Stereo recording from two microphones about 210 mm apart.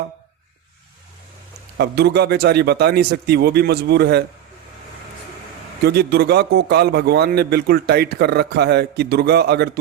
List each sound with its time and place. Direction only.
1.8 s a man's voice: 50° right (ahead or behind)
5.8 s a man's voice: 50° right (ahead or behind)